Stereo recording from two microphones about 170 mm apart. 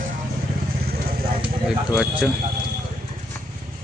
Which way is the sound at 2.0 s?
5° right (ahead or behind).